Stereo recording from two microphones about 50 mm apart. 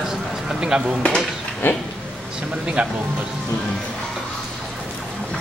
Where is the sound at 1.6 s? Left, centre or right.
Left.